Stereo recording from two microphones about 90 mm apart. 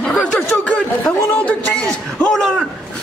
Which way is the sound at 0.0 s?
10° left (ahead or behind).